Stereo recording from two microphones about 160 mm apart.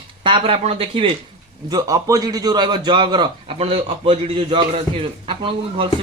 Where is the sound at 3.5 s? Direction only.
40° right (ahead or behind).